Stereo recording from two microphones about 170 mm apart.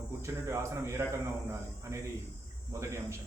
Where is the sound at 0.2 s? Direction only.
15° right (ahead or behind).